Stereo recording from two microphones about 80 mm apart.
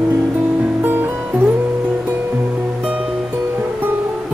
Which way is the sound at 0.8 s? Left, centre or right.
Right.